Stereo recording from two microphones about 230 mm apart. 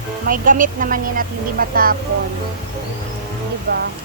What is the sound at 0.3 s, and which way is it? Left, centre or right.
A woman's voice, right.